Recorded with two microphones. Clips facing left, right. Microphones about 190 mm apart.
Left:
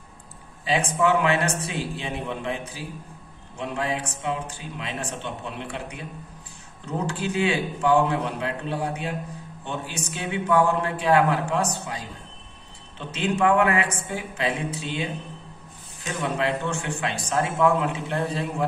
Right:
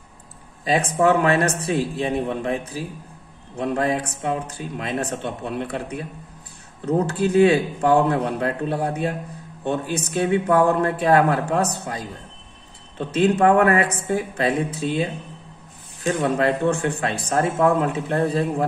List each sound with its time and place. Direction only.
0.7 s speech: 40° right (ahead or behind)
7.2 s speech: 45° right (ahead or behind)